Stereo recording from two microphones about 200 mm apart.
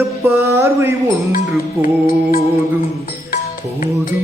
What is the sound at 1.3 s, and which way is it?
Music, 40° left (ahead or behind).